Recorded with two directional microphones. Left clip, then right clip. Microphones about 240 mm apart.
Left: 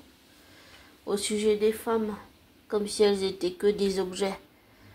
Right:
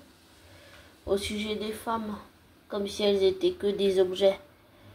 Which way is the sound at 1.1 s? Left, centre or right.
Left.